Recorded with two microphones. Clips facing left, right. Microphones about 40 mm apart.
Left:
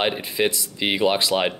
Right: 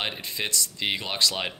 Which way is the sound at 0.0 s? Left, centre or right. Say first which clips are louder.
Left 9 dB; centre.